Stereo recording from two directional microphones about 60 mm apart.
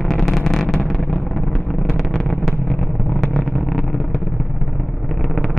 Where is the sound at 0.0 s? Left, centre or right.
Centre.